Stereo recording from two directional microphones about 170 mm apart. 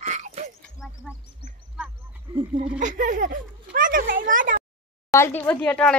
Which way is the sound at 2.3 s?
30° right (ahead or behind).